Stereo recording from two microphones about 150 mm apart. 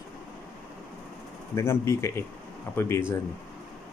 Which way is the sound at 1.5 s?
20° left (ahead or behind).